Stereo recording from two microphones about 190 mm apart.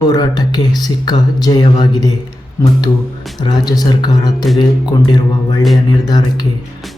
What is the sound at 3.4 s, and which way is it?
Speech, 20° left (ahead or behind).